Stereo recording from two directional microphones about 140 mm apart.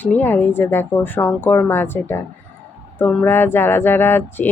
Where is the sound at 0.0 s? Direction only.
15° left (ahead or behind).